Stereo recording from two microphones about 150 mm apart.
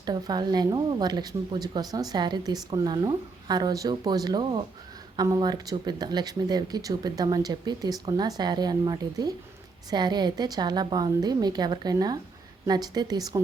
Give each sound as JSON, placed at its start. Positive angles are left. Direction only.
{"t": 0.0, "sound": "speech", "side_deg": -30}